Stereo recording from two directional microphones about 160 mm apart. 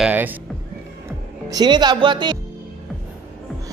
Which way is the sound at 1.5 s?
25° right (ahead or behind).